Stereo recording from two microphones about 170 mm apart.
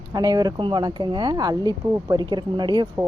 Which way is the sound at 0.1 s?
20° right (ahead or behind).